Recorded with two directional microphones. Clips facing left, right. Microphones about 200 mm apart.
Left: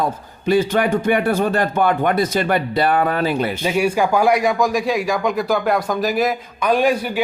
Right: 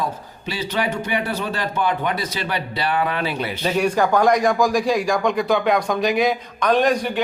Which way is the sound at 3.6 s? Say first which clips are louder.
Right 1 dB; 10° left (ahead or behind).